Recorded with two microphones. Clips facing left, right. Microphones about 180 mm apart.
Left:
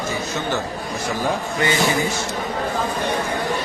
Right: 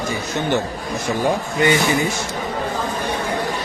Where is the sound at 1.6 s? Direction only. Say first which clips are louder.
Right 3 dB; 20° right (ahead or behind).